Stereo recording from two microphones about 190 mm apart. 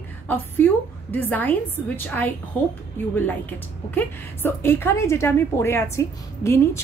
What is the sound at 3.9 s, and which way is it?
A woman's voice, 10° left (ahead or behind).